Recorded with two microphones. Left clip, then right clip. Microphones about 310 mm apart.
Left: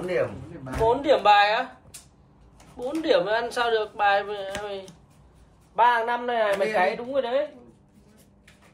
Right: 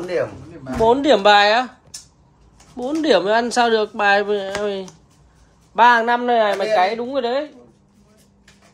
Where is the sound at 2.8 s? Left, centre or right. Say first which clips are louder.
Right 6 dB; right.